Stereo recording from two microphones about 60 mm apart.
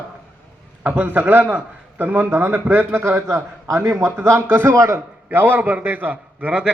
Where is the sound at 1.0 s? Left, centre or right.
Right.